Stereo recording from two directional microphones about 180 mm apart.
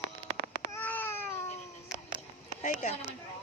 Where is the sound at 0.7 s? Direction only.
10° left (ahead or behind).